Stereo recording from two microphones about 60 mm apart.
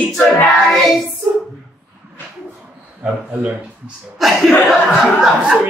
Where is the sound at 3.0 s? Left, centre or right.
Right.